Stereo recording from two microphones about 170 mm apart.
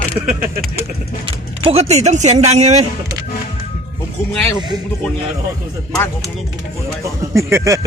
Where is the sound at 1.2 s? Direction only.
35° right (ahead or behind).